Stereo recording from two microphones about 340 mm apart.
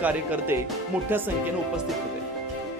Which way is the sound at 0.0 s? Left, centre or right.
Centre.